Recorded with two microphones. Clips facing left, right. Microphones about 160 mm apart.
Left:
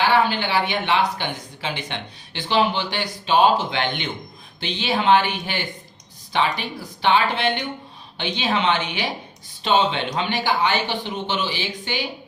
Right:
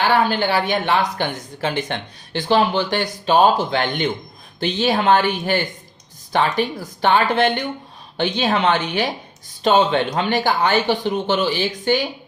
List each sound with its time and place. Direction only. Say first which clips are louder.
0.1 s speech: right 2 dB; 45° right (ahead or behind)